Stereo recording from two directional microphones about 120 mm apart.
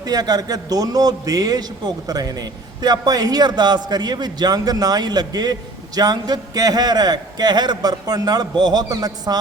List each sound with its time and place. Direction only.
0.0 s a man's voice: 35° right (ahead or behind)